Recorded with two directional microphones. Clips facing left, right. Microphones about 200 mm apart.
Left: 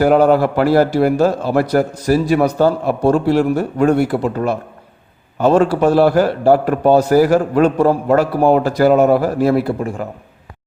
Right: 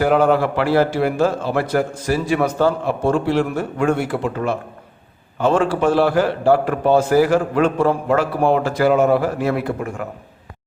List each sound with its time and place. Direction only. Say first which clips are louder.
0.0 s a man's voice: left 4 dB; 40° left (ahead or behind)